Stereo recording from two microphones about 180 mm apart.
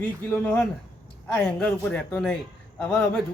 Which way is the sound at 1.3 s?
5° left (ahead or behind).